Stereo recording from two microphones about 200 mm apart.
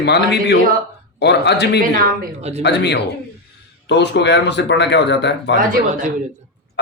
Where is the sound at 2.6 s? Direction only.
55° left (ahead or behind).